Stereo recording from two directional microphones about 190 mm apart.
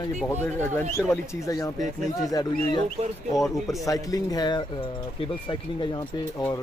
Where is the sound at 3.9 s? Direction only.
20° left (ahead or behind).